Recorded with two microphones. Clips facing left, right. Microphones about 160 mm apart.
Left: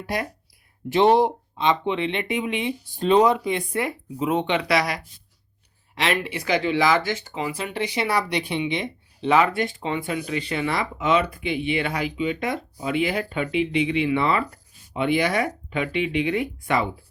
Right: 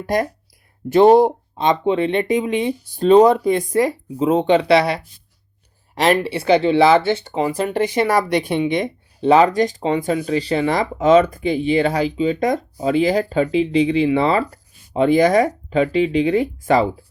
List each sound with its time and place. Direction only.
0.0 s speech: 40° right (ahead or behind)
5.9 s speech: 40° right (ahead or behind)
7.3 s speech: 45° right (ahead or behind)